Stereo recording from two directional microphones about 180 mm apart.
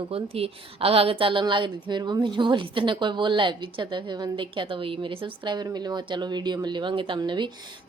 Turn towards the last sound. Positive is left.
turn(degrees=-25)  # may be behind; listen again after turning